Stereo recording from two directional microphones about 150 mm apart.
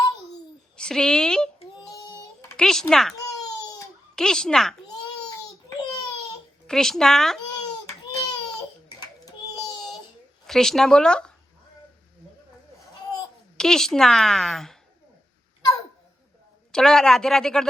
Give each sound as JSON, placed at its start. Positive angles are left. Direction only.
{"t": 0.8, "sound": "a woman's voice", "side_deg": 5}
{"t": 2.6, "sound": "a child's voice", "side_deg": 5}
{"t": 5.6, "sound": "a sound", "side_deg": 25}
{"t": 6.7, "sound": "a woman's voice", "side_deg": 5}
{"t": 7.5, "sound": "baby cry", "side_deg": 25}
{"t": 10.4, "sound": "speech", "side_deg": 5}
{"t": 13.6, "sound": "a woman's voice", "side_deg": 5}
{"t": 16.7, "sound": "a woman's voice", "side_deg": 5}